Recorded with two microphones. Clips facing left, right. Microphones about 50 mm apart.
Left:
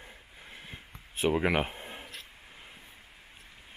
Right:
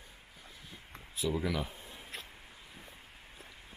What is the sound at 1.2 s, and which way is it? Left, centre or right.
Speech, left.